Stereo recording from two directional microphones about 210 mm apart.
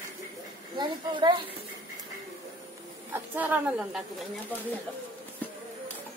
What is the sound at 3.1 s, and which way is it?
Speech, 10° right (ahead or behind).